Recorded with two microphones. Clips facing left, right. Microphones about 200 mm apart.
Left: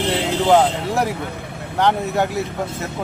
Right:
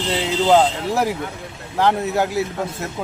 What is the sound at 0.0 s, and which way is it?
Vehicle, 60° left (ahead or behind).